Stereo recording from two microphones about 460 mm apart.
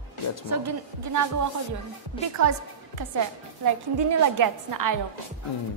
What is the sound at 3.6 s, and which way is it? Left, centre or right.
A woman's voice, right.